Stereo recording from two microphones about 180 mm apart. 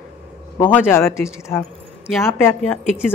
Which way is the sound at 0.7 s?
15° left (ahead or behind).